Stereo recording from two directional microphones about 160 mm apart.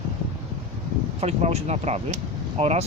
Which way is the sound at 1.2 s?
40° right (ahead or behind).